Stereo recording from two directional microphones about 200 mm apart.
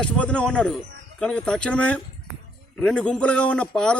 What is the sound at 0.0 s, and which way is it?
A man's voice, 5° left (ahead or behind).